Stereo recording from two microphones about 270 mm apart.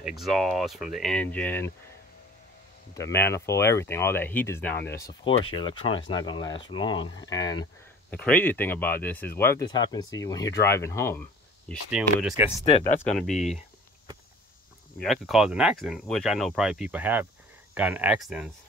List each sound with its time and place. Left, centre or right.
0.0 s speech: centre
2.9 s speech: centre
7.1 s speech: left
7.3 s speech: centre
11.9 s speech: centre
12.6 s speech: left
13.1 s speech: centre
15.0 s speech: centre